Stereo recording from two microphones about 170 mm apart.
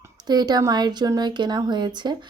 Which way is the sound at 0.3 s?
25° right (ahead or behind).